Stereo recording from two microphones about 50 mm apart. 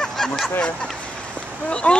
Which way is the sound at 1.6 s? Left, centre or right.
Left.